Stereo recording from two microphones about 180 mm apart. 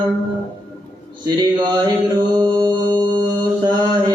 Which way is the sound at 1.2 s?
25° right (ahead or behind).